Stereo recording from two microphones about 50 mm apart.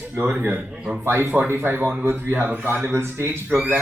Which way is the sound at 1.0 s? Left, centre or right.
Right.